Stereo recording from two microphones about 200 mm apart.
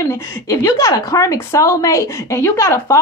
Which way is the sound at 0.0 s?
15° left (ahead or behind).